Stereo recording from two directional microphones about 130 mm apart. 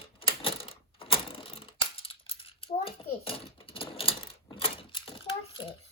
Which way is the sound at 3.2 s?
45° left (ahead or behind).